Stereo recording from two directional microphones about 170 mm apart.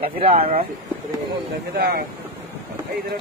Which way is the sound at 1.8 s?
60° right (ahead or behind).